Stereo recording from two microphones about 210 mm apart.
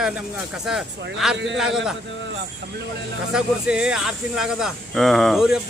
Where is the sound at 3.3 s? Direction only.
5° right (ahead or behind).